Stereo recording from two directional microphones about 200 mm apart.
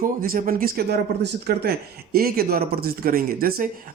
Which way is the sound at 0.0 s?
45° right (ahead or behind).